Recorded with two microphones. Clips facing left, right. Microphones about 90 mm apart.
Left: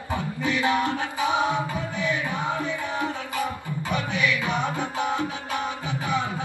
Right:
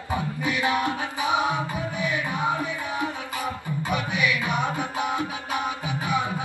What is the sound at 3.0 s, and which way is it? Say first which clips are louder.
Music: left 1 dB; 15° right (ahead or behind).